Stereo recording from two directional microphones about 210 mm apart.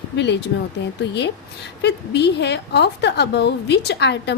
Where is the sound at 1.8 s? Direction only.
55° left (ahead or behind).